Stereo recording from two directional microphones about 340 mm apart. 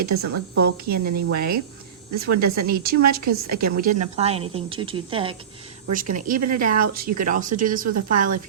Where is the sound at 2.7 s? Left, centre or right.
Right.